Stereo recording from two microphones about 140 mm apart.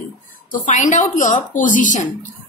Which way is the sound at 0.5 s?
65° left (ahead or behind).